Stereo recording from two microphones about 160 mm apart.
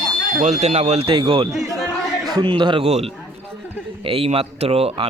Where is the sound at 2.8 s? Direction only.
40° right (ahead or behind).